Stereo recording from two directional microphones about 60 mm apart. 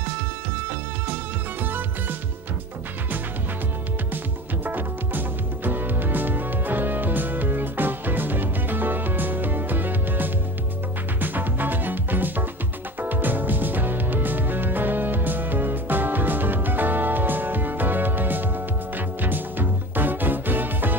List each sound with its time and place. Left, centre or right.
1.6 s music: right
4.6 s music: right